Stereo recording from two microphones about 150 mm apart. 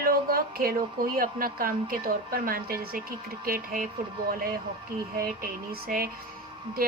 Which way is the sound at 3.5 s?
70° right (ahead or behind).